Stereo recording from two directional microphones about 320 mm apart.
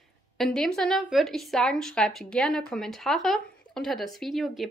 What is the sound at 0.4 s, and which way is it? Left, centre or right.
Speech, centre.